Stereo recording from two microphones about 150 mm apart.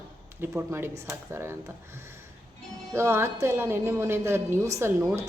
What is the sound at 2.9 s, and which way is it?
A woman's voice, 15° right (ahead or behind).